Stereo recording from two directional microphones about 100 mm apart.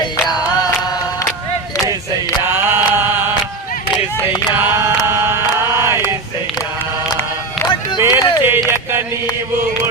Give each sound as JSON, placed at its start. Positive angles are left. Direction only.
{"t": 2.5, "sound": "mantra", "side_deg": -20}
{"t": 4.6, "sound": "chant", "side_deg": -25}
{"t": 5.5, "sound": "a sound", "side_deg": -25}
{"t": 8.0, "sound": "music", "side_deg": -25}